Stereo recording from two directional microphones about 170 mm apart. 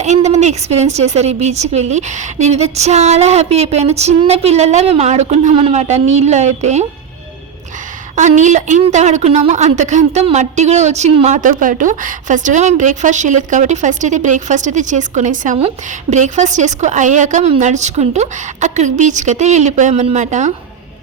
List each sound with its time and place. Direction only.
0.0 s a woman's voice: 40° right (ahead or behind)
8.1 s a woman's voice: 45° right (ahead or behind)